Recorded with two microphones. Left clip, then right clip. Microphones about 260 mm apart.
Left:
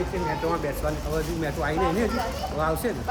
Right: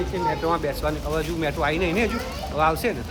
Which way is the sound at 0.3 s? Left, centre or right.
Centre.